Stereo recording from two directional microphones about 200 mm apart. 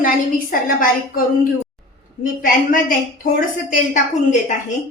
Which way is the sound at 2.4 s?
45° left (ahead or behind).